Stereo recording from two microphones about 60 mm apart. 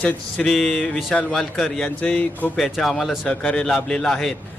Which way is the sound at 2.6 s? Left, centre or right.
Centre.